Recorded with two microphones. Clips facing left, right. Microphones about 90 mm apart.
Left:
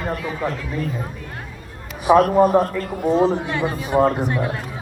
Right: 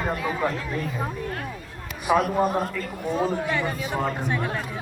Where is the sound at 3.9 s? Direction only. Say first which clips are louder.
Left 12 dB; 55° left (ahead or behind).